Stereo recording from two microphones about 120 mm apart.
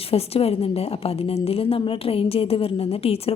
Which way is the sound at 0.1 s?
55° left (ahead or behind).